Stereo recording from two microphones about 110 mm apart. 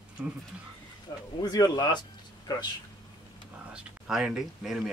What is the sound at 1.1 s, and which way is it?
A man's voice, 30° left (ahead or behind).